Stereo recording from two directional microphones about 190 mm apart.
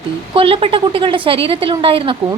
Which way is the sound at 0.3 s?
30° right (ahead or behind).